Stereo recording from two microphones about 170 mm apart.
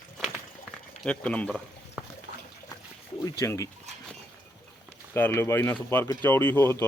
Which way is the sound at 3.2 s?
20° left (ahead or behind).